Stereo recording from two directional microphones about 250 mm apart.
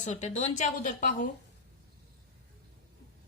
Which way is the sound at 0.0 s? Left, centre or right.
Left.